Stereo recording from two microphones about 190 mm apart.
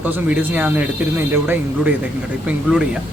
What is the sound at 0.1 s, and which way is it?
Speech, 10° right (ahead or behind).